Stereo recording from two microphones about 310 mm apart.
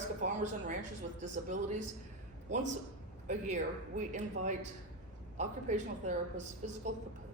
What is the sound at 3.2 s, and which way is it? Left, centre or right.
Speech, right.